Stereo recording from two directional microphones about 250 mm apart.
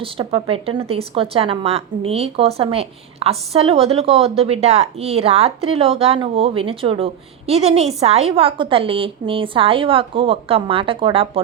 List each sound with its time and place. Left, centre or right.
0.0 s a woman's voice: right